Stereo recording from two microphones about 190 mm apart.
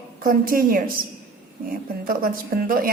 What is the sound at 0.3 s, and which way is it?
Speech, 50° right (ahead or behind).